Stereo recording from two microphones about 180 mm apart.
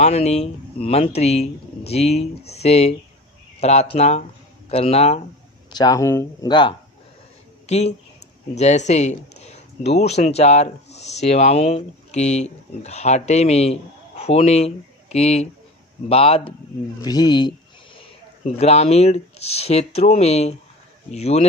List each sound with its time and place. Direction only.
0.0 s speech: 35° left (ahead or behind)
5.7 s speech: 20° left (ahead or behind)
7.7 s speech: 35° left (ahead or behind)
17.0 s speech: 20° left (ahead or behind); by 21.4 s 35° left (ahead or behind)